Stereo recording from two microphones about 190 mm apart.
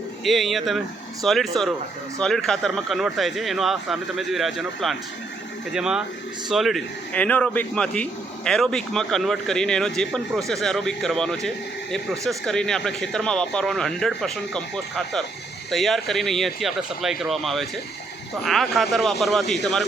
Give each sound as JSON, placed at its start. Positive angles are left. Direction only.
{"t": 0.3, "sound": "speech", "side_deg": 0}